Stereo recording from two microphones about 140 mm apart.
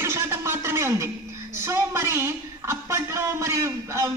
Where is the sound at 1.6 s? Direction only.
20° right (ahead or behind).